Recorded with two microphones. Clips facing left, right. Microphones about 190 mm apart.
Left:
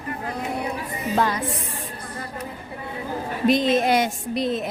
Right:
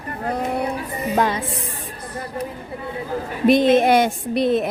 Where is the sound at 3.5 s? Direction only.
60° right (ahead or behind).